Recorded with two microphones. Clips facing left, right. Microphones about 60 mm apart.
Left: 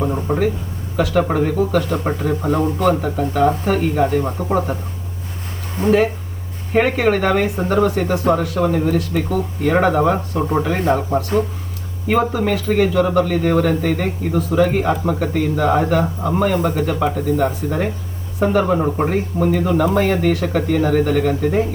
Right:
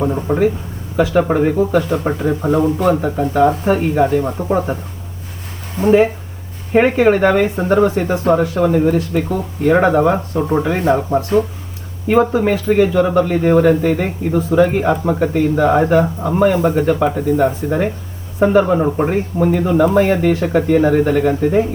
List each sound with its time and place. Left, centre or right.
0.0 s speech: centre
4.4 s speech: centre
6.7 s speech: centre